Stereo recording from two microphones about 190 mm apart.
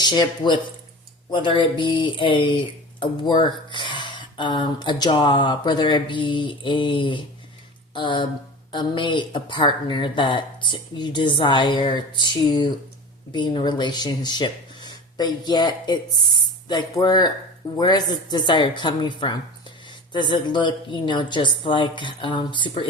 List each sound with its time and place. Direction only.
0.0 s speech: 20° left (ahead or behind)